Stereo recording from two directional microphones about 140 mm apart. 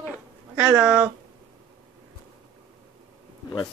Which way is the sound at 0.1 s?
10° right (ahead or behind).